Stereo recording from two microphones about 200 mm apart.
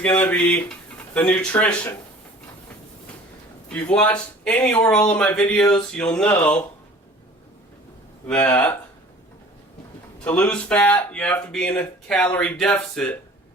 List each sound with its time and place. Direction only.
0.0 s speech: 10° left (ahead or behind)
3.7 s speech: 5° left (ahead or behind)
8.3 s speech: 5° left (ahead or behind)
10.2 s speech: 5° left (ahead or behind)